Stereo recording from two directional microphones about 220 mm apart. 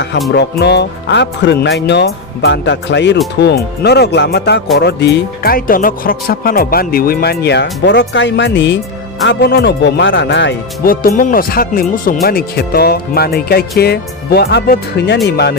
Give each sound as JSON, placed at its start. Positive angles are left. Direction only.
{"t": 0.3, "sound": "speech", "side_deg": 50}